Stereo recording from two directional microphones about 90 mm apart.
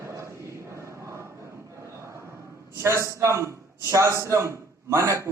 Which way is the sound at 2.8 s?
30° right (ahead or behind).